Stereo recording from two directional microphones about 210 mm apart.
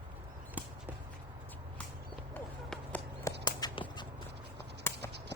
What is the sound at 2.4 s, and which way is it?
Run, 10° left (ahead or behind).